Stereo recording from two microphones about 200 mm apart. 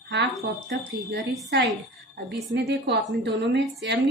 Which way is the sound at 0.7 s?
55° right (ahead or behind).